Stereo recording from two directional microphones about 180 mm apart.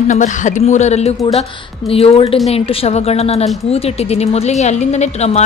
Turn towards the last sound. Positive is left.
turn(degrees=35)  # may be behind; listen again after turning